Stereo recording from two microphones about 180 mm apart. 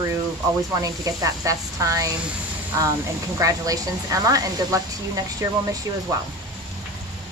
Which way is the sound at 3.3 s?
20° right (ahead or behind).